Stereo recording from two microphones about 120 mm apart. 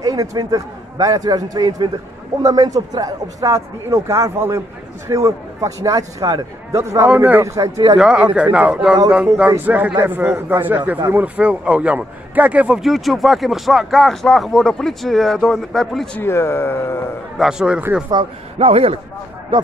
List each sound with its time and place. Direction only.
0.0 s a man's voice: 30° right (ahead or behind)
7.1 s a man's voice: 15° right (ahead or behind); by 8.0 s 30° right (ahead or behind)
8.0 s a man's voice: 5° right (ahead or behind)
16.2 s speech: 20° left (ahead or behind)
17.4 s a man's voice: 5° right (ahead or behind)
18.6 s a man's voice: 55° right (ahead or behind)
19.5 s a man's voice: 40° right (ahead or behind)